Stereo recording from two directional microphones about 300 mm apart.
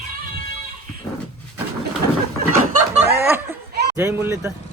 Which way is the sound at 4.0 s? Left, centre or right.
Centre.